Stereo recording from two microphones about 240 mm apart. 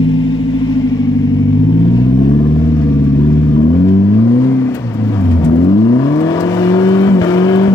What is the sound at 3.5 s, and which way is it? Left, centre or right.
Vehicle, centre.